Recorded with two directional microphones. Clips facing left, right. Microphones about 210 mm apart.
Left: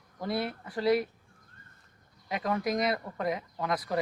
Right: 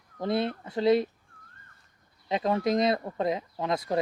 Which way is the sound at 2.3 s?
25° right (ahead or behind).